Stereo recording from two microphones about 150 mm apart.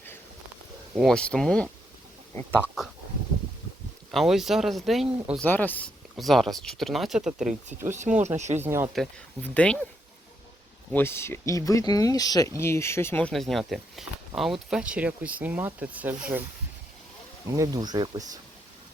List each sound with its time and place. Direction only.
0.9 s speech: 5° left (ahead or behind)
4.1 s speech: centre (ahead or behind)
5.4 s speech: 10° left (ahead or behind)
6.1 s speech: centre (ahead or behind)
7.9 s speech: 55° right (ahead or behind)
8.6 s speech: 15° right (ahead or behind)
9.4 s speech: 10° left (ahead or behind)
10.9 s speech: 15° left (ahead or behind)
13.3 s speech: centre (ahead or behind)
17.5 s speech: 25° right (ahead or behind)